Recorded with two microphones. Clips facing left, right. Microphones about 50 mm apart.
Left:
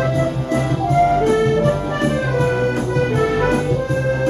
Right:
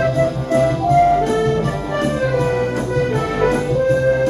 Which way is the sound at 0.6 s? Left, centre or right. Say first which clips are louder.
Right 3 dB; right.